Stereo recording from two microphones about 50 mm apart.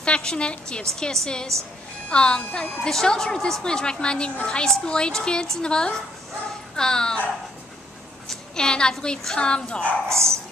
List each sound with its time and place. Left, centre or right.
0.0 s a woman's voice: centre
8.3 s a woman's voice: centre